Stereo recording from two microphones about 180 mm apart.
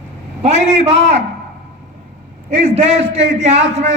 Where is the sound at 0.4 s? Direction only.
35° right (ahead or behind).